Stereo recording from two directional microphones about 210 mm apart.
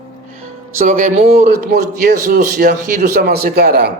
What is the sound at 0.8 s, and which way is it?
Speech, 40° right (ahead or behind).